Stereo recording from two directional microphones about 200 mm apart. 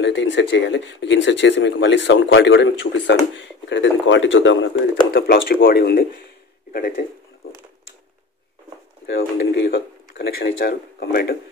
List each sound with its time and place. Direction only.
0.0 s speech: 65° left (ahead or behind)
4.9 s speech: 50° left (ahead or behind)
9.0 s speech: 55° left (ahead or behind)